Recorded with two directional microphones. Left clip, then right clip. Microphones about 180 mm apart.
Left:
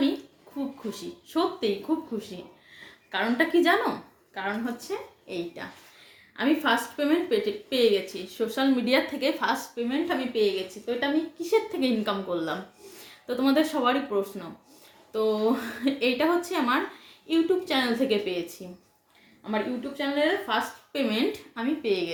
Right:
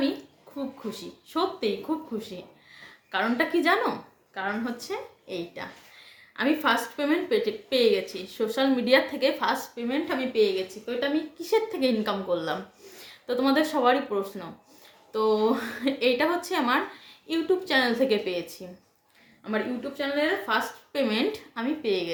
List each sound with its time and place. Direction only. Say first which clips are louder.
0.9 s a woman's voice: left 1 dB; 20° right (ahead or behind)
20.0 s a woman's voice: left 1 dB; 20° right (ahead or behind)